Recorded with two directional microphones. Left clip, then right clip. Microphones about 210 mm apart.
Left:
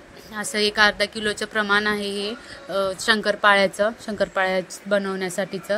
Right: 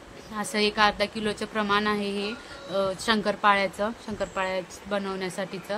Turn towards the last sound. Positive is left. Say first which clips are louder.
# left 6 dB
turn(degrees=15)  # may be behind; listen again after turning